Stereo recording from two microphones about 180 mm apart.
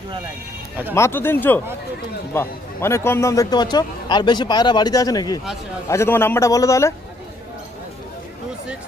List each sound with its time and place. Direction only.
0.9 s a man's voice: 15° left (ahead or behind)